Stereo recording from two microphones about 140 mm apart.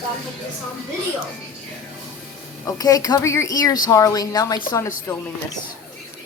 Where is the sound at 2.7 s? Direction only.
25° left (ahead or behind).